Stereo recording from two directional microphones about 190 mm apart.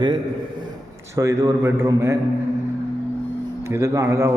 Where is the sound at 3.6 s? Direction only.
15° right (ahead or behind).